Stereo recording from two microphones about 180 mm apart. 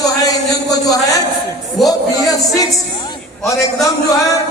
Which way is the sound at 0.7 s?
20° left (ahead or behind).